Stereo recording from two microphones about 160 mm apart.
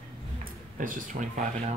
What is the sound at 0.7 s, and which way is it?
Speech, 55° right (ahead or behind).